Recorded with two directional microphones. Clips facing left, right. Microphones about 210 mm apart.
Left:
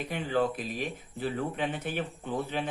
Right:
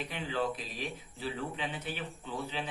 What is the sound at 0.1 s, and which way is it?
Speech, 50° left (ahead or behind).